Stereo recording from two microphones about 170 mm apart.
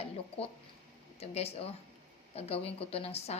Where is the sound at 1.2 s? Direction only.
35° left (ahead or behind).